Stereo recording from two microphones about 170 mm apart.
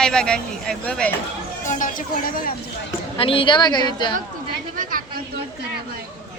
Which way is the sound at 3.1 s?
30° left (ahead or behind).